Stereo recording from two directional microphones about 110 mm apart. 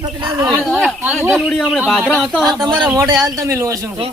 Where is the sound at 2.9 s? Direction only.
35° right (ahead or behind).